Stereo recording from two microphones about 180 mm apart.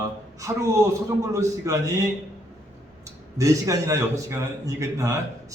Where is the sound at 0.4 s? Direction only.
15° right (ahead or behind).